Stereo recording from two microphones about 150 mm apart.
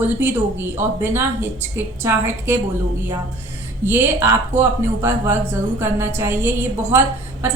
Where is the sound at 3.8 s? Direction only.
15° right (ahead or behind).